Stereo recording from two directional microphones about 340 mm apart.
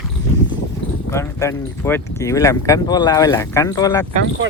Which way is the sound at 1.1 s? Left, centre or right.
Centre.